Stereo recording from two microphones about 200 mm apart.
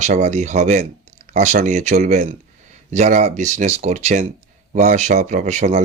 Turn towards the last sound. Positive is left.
turn(degrees=-35)  # may be behind; listen again after turning